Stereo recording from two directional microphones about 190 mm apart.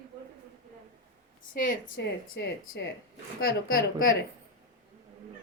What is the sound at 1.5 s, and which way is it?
Speech, 45° left (ahead or behind).